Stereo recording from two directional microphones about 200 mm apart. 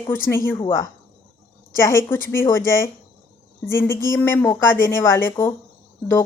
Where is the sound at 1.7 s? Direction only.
15° left (ahead or behind).